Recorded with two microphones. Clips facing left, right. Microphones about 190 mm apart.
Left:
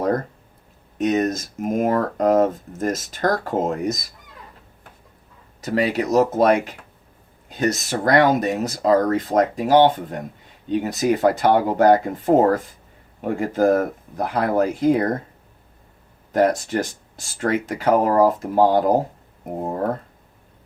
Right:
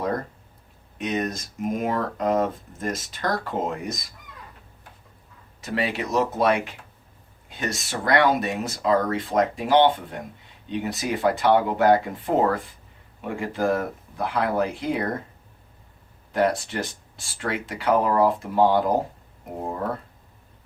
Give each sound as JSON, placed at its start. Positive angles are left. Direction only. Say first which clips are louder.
{"t": 0.9, "sound": "speech", "louder": "left 7 dB", "side_deg": 45}
{"t": 5.5, "sound": "speech", "louder": "left 6 dB", "side_deg": 40}
{"t": 16.3, "sound": "speech", "louder": "left 4 dB", "side_deg": 45}